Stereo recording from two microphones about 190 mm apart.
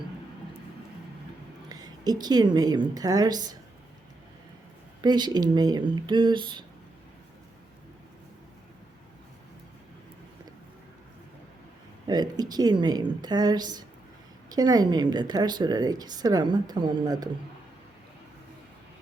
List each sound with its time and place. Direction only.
1.7 s a woman's voice: 20° right (ahead or behind)
5.0 s a woman's voice: 20° right (ahead or behind)
12.0 s a woman's voice: 20° right (ahead or behind)